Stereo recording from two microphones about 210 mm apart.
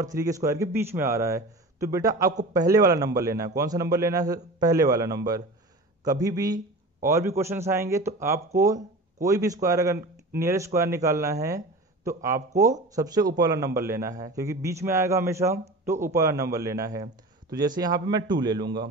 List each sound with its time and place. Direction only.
0.0 s a man's voice: 15° right (ahead or behind)